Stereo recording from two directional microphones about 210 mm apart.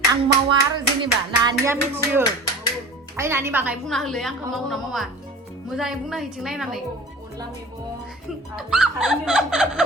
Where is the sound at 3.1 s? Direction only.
10° right (ahead or behind).